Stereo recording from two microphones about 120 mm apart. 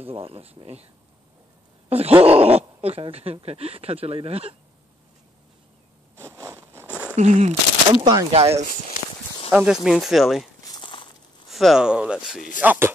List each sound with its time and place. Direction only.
0.1 s speech: 55° right (ahead or behind)
1.9 s speech: 55° right (ahead or behind)
6.1 s zipper: 25° right (ahead or behind)
7.2 s speech: 70° right (ahead or behind)
7.9 s speech: 35° right (ahead or behind)
8.3 s speech: 55° right (ahead or behind)
9.5 s speech: 15° right (ahead or behind)
9.8 s speech: centre (ahead or behind)
10.6 s walk: 35° left (ahead or behind)
11.4 s speech: centre (ahead or behind)